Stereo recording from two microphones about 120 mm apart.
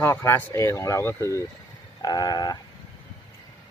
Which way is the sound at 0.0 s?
20° left (ahead or behind).